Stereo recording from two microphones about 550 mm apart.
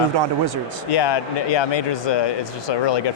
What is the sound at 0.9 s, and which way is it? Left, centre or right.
Speech, left.